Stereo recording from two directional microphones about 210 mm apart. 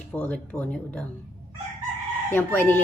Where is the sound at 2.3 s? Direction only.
10° left (ahead or behind).